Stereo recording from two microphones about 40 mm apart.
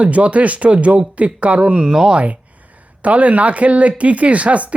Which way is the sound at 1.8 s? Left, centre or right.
Centre.